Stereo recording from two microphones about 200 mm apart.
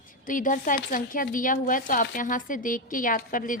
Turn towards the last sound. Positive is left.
turn(degrees=45)  # may be behind; listen again after turning